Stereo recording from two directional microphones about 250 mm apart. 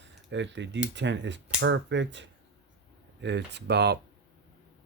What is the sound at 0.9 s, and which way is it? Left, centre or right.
Speech, right.